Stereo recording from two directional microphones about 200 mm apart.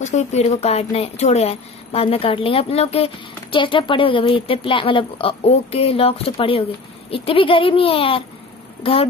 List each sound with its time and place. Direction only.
0.0 s speech: 35° left (ahead or behind)